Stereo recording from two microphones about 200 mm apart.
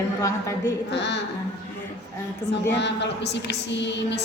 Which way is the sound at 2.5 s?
60° left (ahead or behind).